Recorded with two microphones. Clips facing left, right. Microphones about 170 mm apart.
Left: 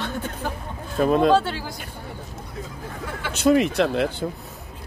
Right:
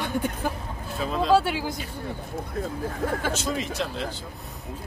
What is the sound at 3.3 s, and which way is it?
Speech, 65° left (ahead or behind).